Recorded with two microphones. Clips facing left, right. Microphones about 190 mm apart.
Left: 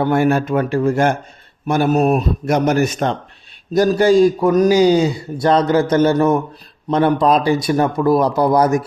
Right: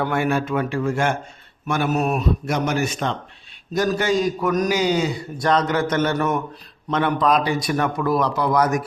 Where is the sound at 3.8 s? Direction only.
35° left (ahead or behind).